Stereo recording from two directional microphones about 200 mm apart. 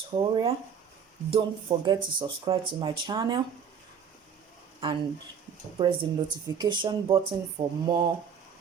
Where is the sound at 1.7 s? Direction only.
25° right (ahead or behind).